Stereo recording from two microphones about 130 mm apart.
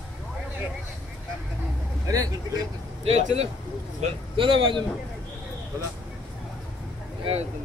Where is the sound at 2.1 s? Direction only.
25° right (ahead or behind).